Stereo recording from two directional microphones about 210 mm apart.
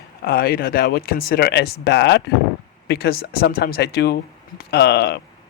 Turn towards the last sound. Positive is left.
turn(degrees=50)  # may be behind; listen again after turning